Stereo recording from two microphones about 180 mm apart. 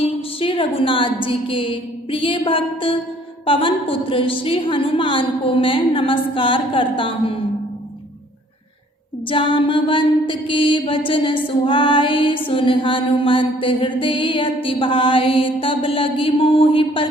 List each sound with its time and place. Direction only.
0.0 s a woman's voice: 30° left (ahead or behind)
3.4 s mantra: 30° left (ahead or behind)
9.3 s mantra: 30° left (ahead or behind)